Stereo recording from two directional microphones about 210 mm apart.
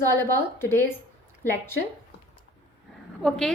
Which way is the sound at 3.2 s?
Centre (ahead or behind).